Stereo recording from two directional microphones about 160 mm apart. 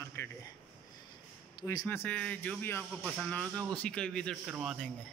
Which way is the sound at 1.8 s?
10° left (ahead or behind).